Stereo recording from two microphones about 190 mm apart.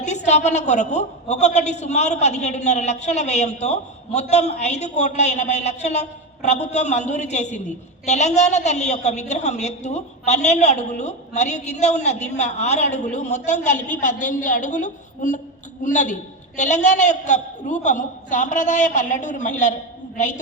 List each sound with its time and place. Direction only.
0.0 s a woman's voice: 40° left (ahead or behind)